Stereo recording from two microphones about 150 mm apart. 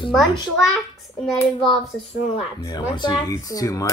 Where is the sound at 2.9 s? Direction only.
30° left (ahead or behind).